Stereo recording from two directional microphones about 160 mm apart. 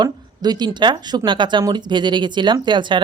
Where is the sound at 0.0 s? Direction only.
25° right (ahead or behind).